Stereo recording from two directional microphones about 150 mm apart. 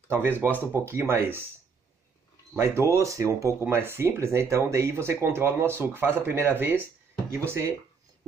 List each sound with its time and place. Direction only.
0.1 s speech: 15° right (ahead or behind)
2.5 s speech: 15° right (ahead or behind)